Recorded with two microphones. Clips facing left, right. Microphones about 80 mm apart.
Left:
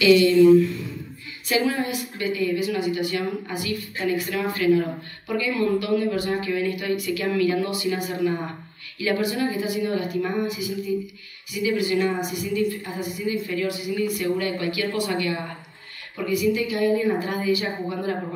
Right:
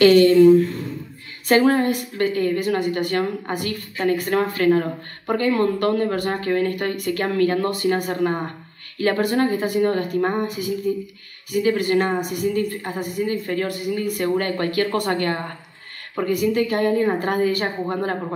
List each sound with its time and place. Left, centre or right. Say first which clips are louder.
0.0 s a woman's voice: right 3 dB; right